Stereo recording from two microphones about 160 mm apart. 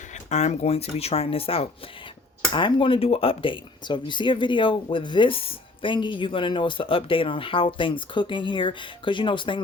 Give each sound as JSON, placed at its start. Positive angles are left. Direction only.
{"t": 0.3, "sound": "speech", "side_deg": 45}